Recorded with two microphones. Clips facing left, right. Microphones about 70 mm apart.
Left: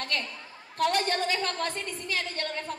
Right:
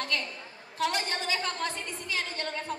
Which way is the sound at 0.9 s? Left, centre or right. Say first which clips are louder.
Left 4 dB; left.